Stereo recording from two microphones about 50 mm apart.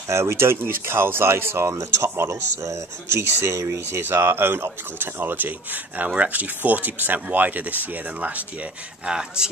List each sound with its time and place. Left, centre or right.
0.1 s speech: right
4.0 s speech: right
9.0 s speech: centre